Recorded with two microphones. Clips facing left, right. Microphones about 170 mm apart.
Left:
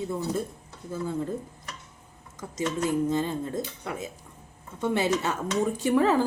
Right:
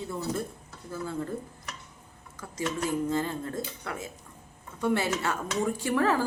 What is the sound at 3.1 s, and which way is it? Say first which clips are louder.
Speech: left 2 dB; 20° left (ahead or behind).